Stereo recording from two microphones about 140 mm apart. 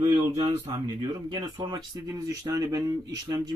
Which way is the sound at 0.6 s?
30° right (ahead or behind).